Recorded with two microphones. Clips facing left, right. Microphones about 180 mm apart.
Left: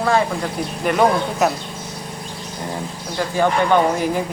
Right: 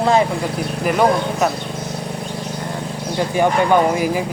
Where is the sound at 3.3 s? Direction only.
10° right (ahead or behind).